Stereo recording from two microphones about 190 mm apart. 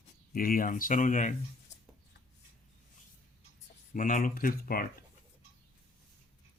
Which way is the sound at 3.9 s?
45° left (ahead or behind).